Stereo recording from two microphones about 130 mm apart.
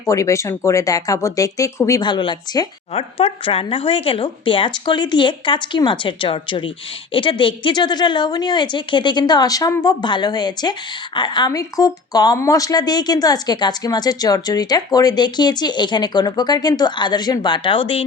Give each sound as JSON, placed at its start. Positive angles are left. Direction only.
{"t": 0.0, "sound": "speech", "side_deg": 25}
{"t": 2.0, "sound": "a woman's voice", "side_deg": 35}
{"t": 2.9, "sound": "a woman's voice", "side_deg": 50}